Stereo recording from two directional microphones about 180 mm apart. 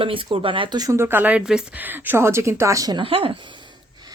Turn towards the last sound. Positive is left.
turn(degrees=-30)  # may be behind; listen again after turning